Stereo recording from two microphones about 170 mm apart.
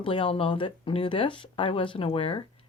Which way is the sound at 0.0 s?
30° left (ahead or behind).